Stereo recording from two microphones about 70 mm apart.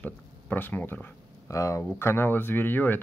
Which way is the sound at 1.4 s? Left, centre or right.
Left.